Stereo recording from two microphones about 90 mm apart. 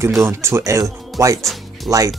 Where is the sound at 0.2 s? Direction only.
30° right (ahead or behind).